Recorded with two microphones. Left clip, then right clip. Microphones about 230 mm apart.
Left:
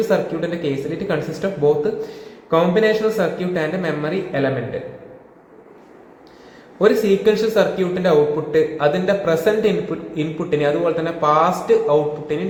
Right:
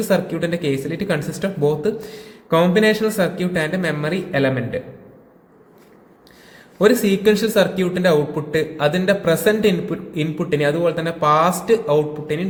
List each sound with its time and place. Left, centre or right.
0.1 s a man's voice: right
6.7 s a man's voice: right